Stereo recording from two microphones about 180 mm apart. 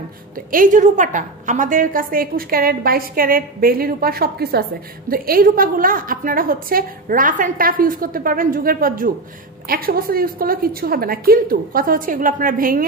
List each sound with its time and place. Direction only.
0.5 s a woman's voice: 45° right (ahead or behind)